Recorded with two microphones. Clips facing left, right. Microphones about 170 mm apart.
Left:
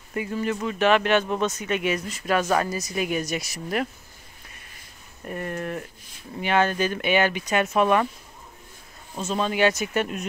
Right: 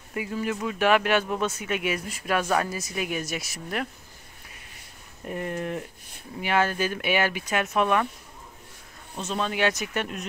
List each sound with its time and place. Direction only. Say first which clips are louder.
0.1 s speech: left 2 dB; 5° right (ahead or behind)
5.2 s speech: even; 15° right (ahead or behind); by 8.1 s centre (ahead or behind)
9.1 s speech: left 3 dB; 5° left (ahead or behind)